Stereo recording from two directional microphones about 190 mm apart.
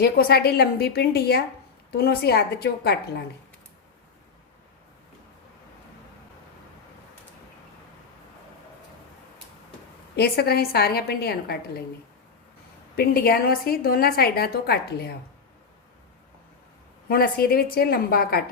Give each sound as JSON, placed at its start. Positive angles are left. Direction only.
{"t": 0.0, "sound": "a woman's voice", "side_deg": 55}
{"t": 10.2, "sound": "a woman's voice", "side_deg": 55}
{"t": 13.0, "sound": "a woman's voice", "side_deg": 55}
{"t": 17.1, "sound": "a woman's voice", "side_deg": 50}